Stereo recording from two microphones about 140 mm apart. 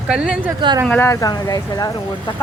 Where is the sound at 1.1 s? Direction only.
25° left (ahead or behind).